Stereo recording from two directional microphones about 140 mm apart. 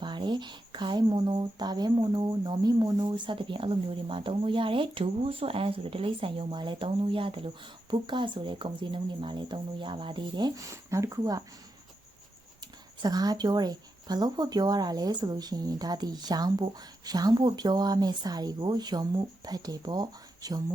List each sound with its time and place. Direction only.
0.0 s speech: 35° right (ahead or behind)
13.0 s speech: 30° right (ahead or behind)